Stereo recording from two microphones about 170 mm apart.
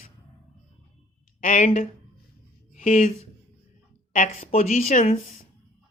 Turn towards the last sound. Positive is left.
turn(degrees=50)  # may be behind; listen again after turning